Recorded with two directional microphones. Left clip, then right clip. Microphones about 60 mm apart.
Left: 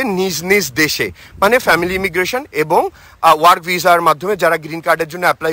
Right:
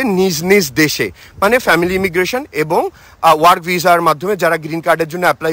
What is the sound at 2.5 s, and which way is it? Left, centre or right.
Speech, right.